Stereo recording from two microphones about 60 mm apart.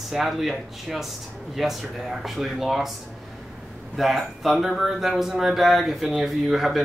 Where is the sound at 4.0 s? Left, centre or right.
Centre.